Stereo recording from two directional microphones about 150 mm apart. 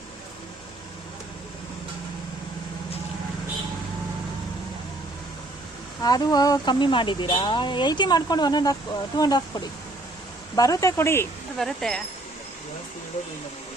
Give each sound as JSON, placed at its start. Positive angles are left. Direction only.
{"t": 6.0, "sound": "speech", "side_deg": 25}
{"t": 11.5, "sound": "speech", "side_deg": 0}